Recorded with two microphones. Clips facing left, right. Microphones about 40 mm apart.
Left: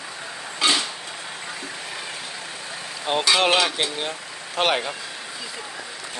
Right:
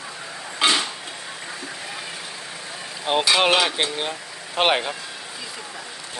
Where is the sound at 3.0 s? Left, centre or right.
Centre.